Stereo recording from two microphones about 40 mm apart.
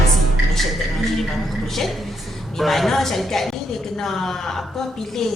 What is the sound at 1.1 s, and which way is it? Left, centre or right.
A woman's voice, centre.